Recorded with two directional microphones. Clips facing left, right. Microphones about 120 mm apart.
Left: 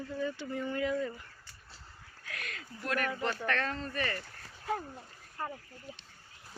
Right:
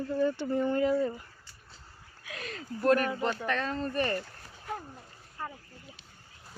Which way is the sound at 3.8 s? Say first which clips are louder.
Right 6 dB; 40° right (ahead or behind).